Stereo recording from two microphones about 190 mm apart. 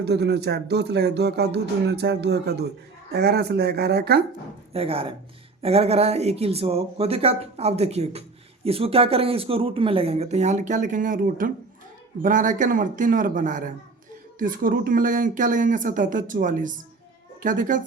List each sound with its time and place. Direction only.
0.0 s speech: 60° right (ahead or behind)
4.7 s speech: 30° right (ahead or behind)